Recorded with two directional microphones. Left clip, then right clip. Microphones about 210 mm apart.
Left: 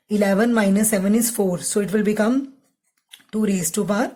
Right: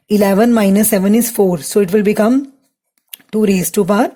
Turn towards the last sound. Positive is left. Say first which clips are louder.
# right 9 dB
turn(degrees=-40)  # may be behind; listen again after turning